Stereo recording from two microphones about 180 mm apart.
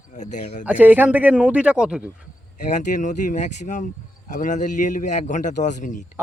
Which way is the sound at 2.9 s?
45° left (ahead or behind).